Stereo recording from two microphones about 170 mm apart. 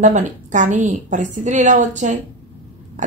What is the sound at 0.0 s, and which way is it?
A woman's voice, 45° right (ahead or behind).